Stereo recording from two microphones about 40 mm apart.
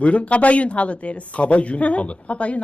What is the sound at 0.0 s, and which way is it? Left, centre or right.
Speech, left.